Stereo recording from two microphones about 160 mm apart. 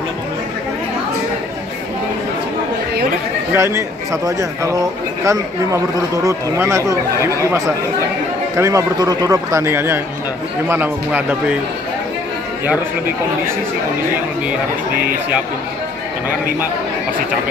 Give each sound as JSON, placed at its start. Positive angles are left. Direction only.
{"t": 3.5, "sound": "a man's voice", "side_deg": -20}